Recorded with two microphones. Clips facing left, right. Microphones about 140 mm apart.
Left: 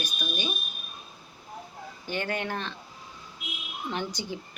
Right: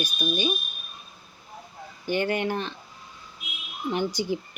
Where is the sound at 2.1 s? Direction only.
15° right (ahead or behind).